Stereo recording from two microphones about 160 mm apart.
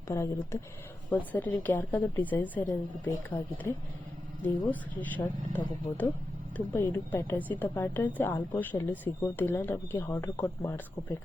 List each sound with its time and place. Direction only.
0.1 s a woman's voice: 20° left (ahead or behind)